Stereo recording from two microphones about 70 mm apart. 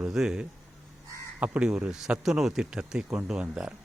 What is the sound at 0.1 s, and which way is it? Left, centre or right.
Speech, centre.